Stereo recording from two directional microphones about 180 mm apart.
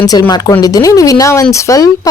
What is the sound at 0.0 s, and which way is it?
A woman's voice, 20° left (ahead or behind).